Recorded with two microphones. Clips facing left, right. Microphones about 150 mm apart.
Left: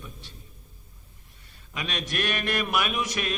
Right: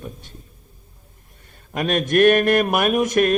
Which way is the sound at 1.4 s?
50° right (ahead or behind).